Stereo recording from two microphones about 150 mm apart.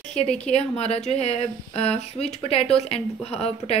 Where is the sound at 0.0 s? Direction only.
45° left (ahead or behind).